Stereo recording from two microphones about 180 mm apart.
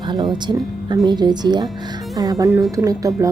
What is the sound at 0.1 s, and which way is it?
Speech, 25° right (ahead or behind).